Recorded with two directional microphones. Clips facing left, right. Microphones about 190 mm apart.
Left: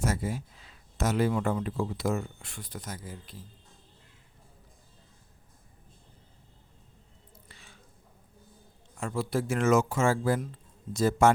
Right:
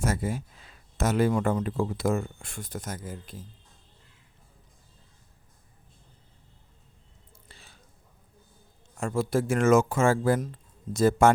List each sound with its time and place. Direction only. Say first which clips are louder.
0.0 s speech: right 2 dB; 50° right (ahead or behind)
7.4 s a sound: right 2 dB; 35° right (ahead or behind)
9.0 s speech: right 4 dB; 45° right (ahead or behind)